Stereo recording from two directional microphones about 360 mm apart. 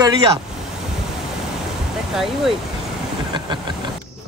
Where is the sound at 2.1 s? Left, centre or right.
Centre.